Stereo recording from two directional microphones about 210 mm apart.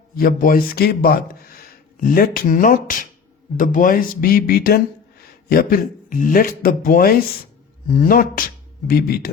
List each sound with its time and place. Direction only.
0.2 s a man's voice: 40° left (ahead or behind)